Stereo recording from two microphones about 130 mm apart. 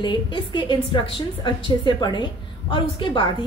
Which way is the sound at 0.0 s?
35° left (ahead or behind).